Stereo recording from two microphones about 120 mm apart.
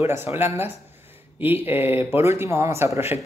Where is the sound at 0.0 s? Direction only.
20° right (ahead or behind).